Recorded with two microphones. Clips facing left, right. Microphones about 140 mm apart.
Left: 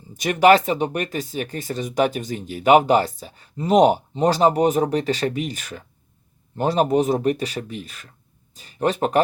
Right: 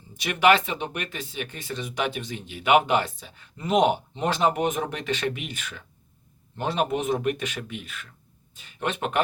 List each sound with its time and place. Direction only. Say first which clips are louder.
0.1 s speech: left 5 dB; 40° left (ahead or behind)